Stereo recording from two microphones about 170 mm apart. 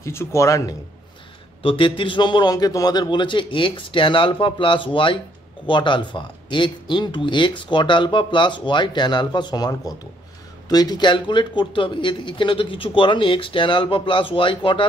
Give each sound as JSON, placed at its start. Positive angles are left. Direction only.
{"t": 0.0, "sound": "speech", "side_deg": 15}
{"t": 1.6, "sound": "speech", "side_deg": 30}